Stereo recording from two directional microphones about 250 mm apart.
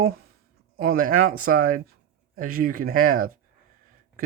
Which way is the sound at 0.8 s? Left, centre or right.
Right.